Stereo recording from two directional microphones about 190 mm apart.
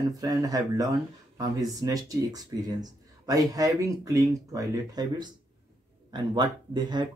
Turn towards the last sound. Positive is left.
turn(degrees=-25)  # may be behind; listen again after turning